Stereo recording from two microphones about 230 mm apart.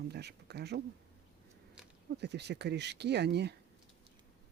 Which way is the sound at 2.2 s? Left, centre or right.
Right.